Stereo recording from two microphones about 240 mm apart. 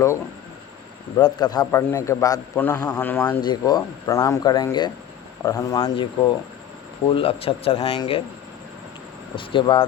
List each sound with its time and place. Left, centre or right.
1.1 s a man's voice: centre
7.1 s speech: left
9.3 s speech: left